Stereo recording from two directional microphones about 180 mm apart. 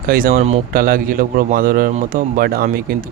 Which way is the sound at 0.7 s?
50° right (ahead or behind).